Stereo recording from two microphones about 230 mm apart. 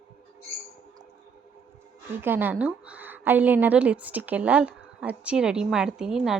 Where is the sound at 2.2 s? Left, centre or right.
Centre.